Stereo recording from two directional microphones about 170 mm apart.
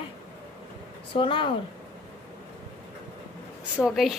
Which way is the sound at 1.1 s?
30° left (ahead or behind).